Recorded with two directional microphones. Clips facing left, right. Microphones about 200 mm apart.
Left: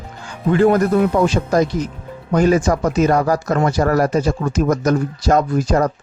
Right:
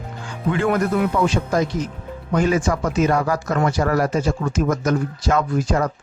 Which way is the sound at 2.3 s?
40° left (ahead or behind).